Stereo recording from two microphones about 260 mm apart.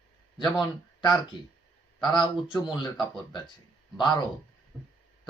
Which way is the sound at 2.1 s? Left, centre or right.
Centre.